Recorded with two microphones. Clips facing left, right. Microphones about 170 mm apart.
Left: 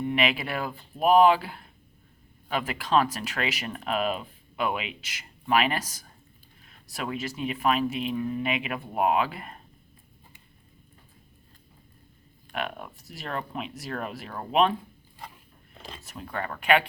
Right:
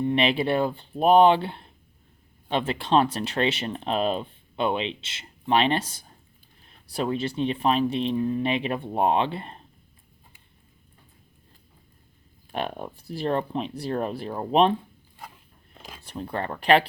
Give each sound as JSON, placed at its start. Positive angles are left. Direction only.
{"t": 0.0, "sound": "speech", "side_deg": -30}
{"t": 12.5, "sound": "speech", "side_deg": -35}
{"t": 16.0, "sound": "speech", "side_deg": -30}